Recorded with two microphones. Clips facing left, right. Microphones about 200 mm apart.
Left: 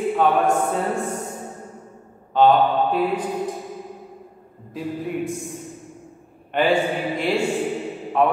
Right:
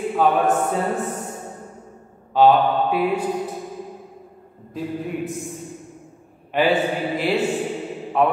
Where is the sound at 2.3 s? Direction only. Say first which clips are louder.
Right 1 dB; 5° right (ahead or behind).